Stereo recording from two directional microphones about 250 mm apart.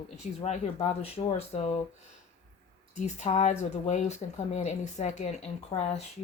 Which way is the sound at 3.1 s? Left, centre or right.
Left.